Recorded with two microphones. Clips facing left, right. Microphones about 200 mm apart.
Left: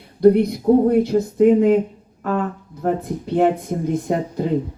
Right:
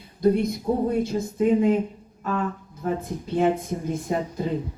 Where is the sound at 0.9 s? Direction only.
60° left (ahead or behind).